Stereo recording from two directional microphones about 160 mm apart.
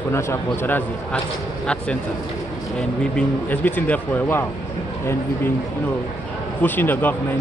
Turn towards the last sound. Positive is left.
turn(degrees=10)  # may be behind; listen again after turning